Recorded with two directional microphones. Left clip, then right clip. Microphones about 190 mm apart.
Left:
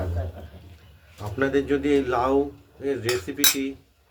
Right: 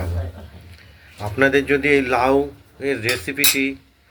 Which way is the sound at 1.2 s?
15° right (ahead or behind).